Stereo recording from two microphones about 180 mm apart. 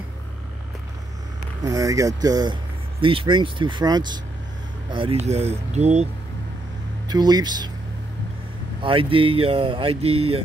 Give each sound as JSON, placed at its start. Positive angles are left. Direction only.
{"t": 1.6, "sound": "speech", "side_deg": -20}
{"t": 7.1, "sound": "speech", "side_deg": -20}
{"t": 8.8, "sound": "speech", "side_deg": -30}